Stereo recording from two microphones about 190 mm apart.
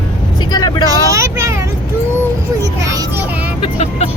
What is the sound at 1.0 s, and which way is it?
Speech, 15° right (ahead or behind).